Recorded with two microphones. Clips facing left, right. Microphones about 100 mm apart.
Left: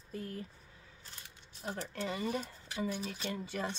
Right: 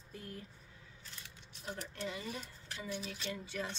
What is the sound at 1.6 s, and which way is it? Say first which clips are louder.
Speech: left 4 dB; 45° left (ahead or behind).